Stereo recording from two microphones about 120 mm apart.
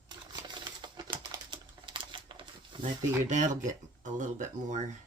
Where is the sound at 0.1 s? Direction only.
40° right (ahead or behind).